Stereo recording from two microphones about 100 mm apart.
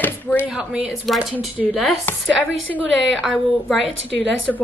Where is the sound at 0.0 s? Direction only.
15° left (ahead or behind).